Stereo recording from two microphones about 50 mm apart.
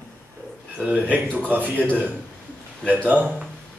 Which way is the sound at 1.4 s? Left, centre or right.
Right.